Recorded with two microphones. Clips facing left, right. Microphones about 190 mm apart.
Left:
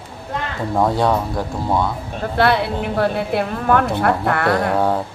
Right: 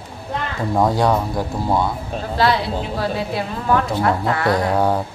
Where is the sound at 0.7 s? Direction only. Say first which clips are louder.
Even; centre (ahead or behind).